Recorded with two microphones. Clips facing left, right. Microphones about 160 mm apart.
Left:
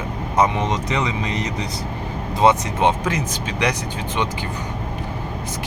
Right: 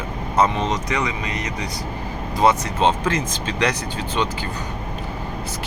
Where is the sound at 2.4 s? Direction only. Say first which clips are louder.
Left 1 dB; 15° left (ahead or behind).